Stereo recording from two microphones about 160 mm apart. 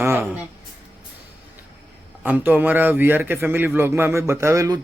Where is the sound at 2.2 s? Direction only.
10° right (ahead or behind).